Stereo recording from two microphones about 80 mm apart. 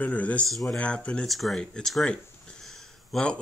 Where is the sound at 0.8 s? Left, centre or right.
Centre.